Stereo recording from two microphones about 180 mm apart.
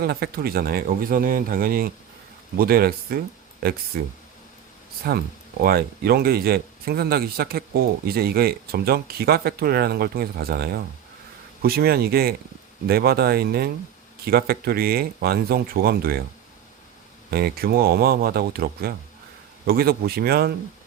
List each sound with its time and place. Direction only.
0.0 s speech: 60° right (ahead or behind)
5.6 s speech: 55° right (ahead or behind)
17.3 s speech: 60° right (ahead or behind)